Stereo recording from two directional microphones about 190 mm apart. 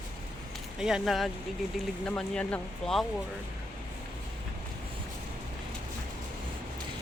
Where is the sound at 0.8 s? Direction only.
Centre (ahead or behind).